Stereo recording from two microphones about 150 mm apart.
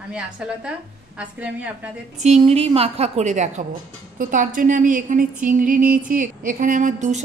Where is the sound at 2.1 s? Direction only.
45° right (ahead or behind).